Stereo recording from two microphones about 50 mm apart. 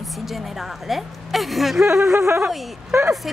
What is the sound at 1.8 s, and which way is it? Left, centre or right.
Speech, right.